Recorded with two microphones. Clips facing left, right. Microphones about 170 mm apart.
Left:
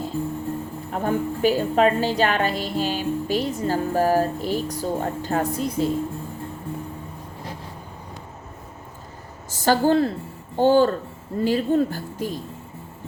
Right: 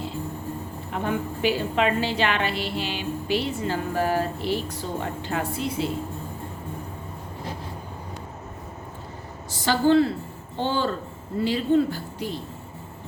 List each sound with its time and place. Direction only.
0.9 s a woman's voice: 40° left (ahead or behind)
9.5 s a woman's voice: 45° left (ahead or behind)